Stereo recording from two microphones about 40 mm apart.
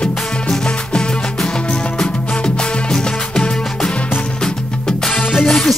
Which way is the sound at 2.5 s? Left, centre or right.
Left.